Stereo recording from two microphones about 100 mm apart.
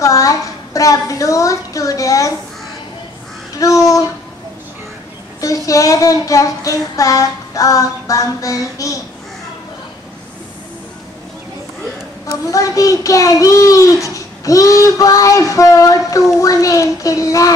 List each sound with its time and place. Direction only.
0.0 s a woman's voice: 35° left (ahead or behind)
3.5 s speech: 35° left (ahead or behind)
5.4 s a child's voice: 35° left (ahead or behind)
12.3 s a child's voice: 35° left (ahead or behind)